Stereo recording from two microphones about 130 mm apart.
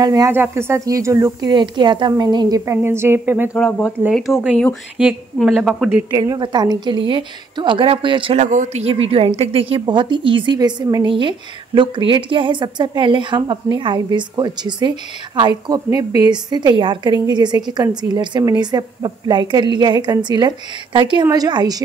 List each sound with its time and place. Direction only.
0.0 s a woman's voice: 30° right (ahead or behind)
1.5 s a woman's voice: 35° right (ahead or behind); by 3.5 s 15° right (ahead or behind)
4.1 s a woman's voice: 5° right (ahead or behind)
6.1 s speech: 30° right (ahead or behind)
8.4 s speech: 70° right (ahead or behind)
8.8 s speech: 50° right (ahead or behind); by 21.8 s 30° right (ahead or behind)